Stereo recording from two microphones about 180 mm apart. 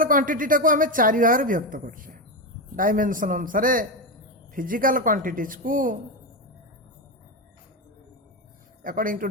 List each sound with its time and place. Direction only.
0.0 s a woman's voice: 50° right (ahead or behind)
8.8 s speech: 50° right (ahead or behind)